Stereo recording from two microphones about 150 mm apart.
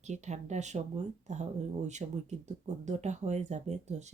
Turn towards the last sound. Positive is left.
turn(degrees=-50)  # may be behind; listen again after turning